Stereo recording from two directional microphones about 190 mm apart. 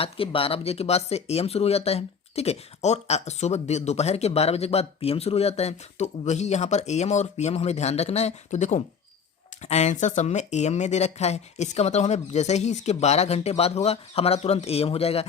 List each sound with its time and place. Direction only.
0.0 s speech: 30° left (ahead or behind)